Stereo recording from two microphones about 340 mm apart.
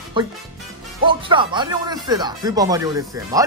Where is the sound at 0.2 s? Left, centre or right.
Centre.